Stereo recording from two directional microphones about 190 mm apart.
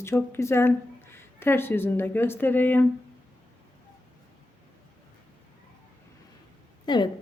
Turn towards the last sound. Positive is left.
turn(degrees=20)  # may be behind; listen again after turning